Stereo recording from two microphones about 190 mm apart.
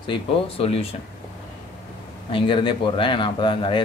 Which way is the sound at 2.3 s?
25° left (ahead or behind).